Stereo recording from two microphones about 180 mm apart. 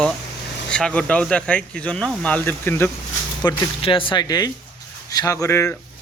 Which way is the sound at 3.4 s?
25° left (ahead or behind).